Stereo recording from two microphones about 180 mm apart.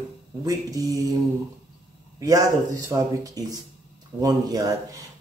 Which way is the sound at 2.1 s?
20° right (ahead or behind).